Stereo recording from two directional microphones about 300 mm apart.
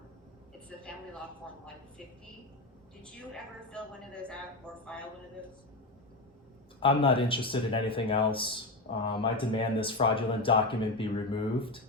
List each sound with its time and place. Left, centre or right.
3.0 s a woman's voice: centre
6.7 s speech: centre